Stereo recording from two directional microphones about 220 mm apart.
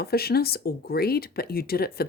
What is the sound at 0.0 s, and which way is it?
Speech, 45° left (ahead or behind).